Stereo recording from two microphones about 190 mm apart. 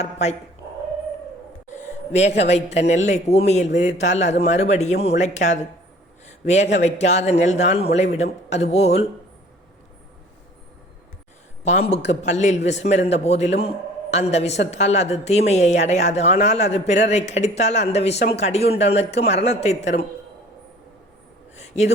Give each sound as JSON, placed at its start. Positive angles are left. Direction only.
{"t": 0.0, "sound": "a woman's voice", "side_deg": 35}
{"t": 1.7, "sound": "a woman's voice", "side_deg": 35}
{"t": 11.6, "sound": "a man's voice", "side_deg": 35}
{"t": 21.6, "sound": "a sound", "side_deg": 35}